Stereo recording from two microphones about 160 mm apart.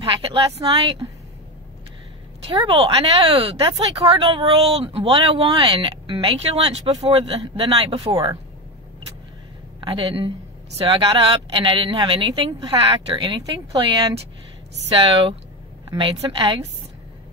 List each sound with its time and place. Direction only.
0.0 s a woman's voice: 30° right (ahead or behind)
2.5 s a woman's voice: 35° right (ahead or behind)
9.8 s a woman's voice: 30° right (ahead or behind)
15.9 s a woman's voice: 30° right (ahead or behind)